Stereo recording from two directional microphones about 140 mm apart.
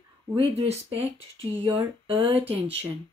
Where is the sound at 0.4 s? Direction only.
45° right (ahead or behind).